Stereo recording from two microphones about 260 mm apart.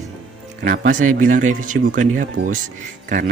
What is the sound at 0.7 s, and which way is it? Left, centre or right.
Speech, right.